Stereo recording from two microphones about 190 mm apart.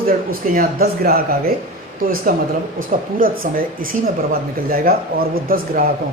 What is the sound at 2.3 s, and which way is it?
Speech, 50° right (ahead or behind).